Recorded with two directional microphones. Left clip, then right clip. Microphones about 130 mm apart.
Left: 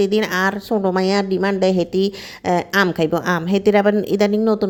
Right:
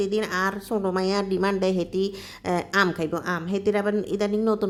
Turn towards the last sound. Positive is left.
turn(degrees=25)  # may be behind; listen again after turning